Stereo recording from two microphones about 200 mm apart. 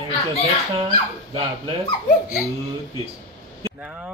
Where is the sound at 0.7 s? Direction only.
25° right (ahead or behind).